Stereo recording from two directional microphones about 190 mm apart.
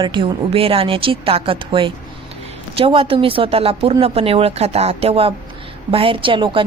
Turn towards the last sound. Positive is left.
turn(degrees=-25)  # may be behind; listen again after turning